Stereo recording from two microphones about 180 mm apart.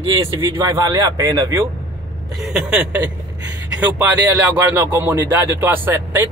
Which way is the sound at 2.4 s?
5° right (ahead or behind).